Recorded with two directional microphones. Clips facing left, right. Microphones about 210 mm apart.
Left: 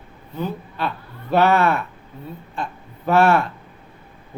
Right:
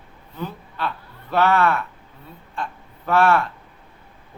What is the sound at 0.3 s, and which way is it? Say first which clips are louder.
Speech: left 4 dB; 20° left (ahead or behind).